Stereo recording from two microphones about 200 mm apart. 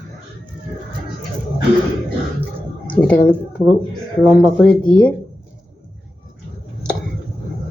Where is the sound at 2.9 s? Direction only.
5° left (ahead or behind).